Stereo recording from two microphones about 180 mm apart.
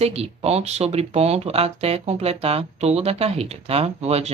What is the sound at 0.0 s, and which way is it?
Speech, 35° right (ahead or behind).